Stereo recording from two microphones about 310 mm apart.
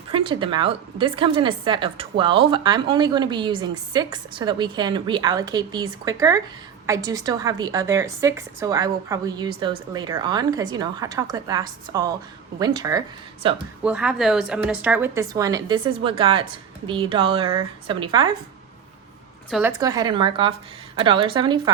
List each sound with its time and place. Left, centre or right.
0.1 s a woman's voice: centre
13.8 s a woman's voice: centre
19.5 s a woman's voice: centre